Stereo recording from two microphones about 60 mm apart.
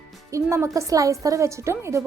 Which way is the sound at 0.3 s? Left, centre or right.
Right.